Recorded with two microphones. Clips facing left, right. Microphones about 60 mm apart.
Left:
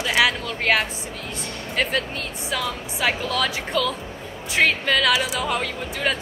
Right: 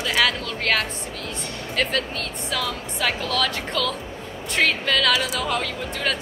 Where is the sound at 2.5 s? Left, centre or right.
Centre.